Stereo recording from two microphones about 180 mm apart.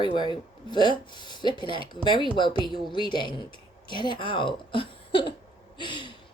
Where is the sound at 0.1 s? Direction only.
25° left (ahead or behind).